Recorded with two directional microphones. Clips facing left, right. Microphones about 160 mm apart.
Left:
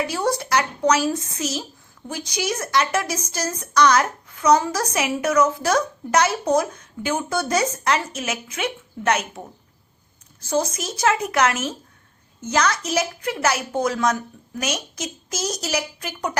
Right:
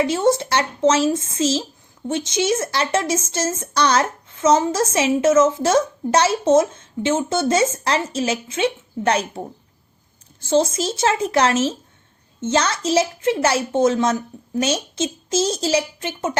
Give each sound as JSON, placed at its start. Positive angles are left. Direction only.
{"t": 0.0, "sound": "speech", "side_deg": -25}
{"t": 10.4, "sound": "speech", "side_deg": -25}